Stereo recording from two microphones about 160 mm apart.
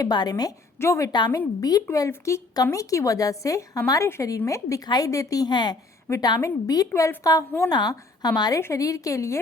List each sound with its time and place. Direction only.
0.0 s a woman's voice: 25° left (ahead or behind)